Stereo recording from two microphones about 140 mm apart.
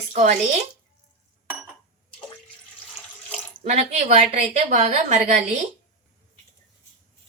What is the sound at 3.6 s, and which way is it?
Speech, 55° right (ahead or behind).